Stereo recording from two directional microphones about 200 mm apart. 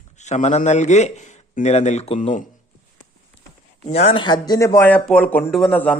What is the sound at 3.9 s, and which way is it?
Speech, 30° left (ahead or behind).